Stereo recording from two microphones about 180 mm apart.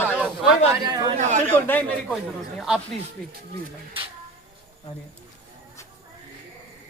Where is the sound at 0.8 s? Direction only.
25° right (ahead or behind).